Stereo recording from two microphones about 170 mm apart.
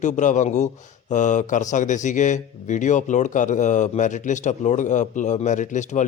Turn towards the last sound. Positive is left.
turn(degrees=45)  # may be behind; listen again after turning